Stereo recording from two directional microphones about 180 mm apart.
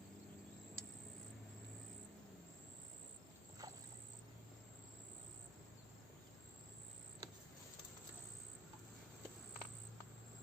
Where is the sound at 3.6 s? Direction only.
20° right (ahead or behind).